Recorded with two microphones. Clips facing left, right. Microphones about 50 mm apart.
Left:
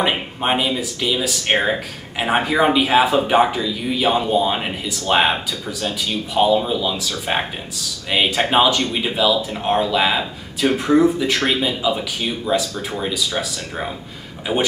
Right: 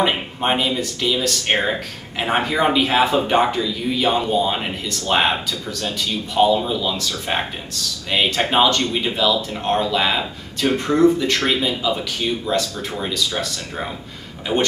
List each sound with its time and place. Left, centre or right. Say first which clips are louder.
0.0 s speech: even; centre
14.5 s speech: even; centre